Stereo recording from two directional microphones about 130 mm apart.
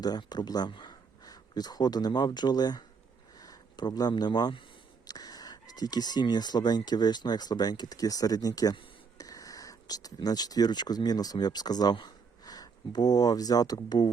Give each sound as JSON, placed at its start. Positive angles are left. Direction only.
{"t": 0.0, "sound": "speech", "side_deg": 30}